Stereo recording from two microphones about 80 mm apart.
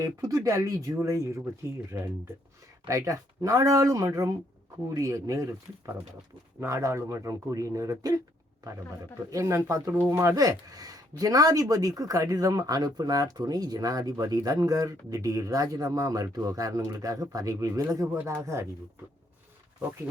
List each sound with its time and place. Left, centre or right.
0.0 s speech: right
9.3 s speech: right
18.1 s speech: right